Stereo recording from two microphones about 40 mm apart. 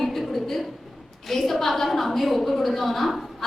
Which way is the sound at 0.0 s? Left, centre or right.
Centre.